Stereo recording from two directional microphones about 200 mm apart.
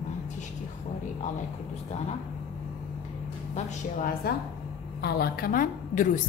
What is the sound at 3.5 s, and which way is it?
A woman's voice, 45° left (ahead or behind).